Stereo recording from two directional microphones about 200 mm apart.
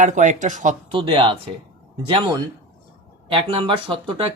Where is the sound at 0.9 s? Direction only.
25° right (ahead or behind).